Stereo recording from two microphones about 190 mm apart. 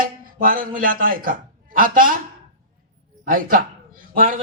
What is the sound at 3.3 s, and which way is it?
A man's voice, 45° right (ahead or behind).